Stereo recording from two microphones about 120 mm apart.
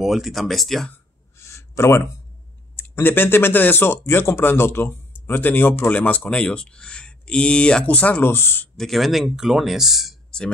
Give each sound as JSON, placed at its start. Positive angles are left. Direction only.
{"t": 0.0, "sound": "speech", "side_deg": 0}
{"t": 1.4, "sound": "a sound", "side_deg": 25}
{"t": 2.7, "sound": "speech", "side_deg": 15}
{"t": 8.7, "sound": "speech", "side_deg": 0}